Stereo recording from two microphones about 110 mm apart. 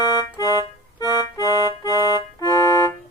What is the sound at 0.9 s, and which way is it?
Accordion, 35° left (ahead or behind).